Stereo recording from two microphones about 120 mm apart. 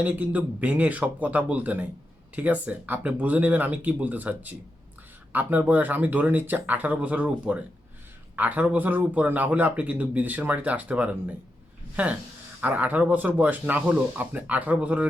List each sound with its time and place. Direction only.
0.0 s speech: 10° right (ahead or behind)
12.6 s speech: 10° right (ahead or behind)